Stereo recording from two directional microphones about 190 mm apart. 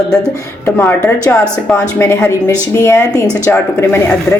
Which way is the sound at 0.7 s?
10° left (ahead or behind).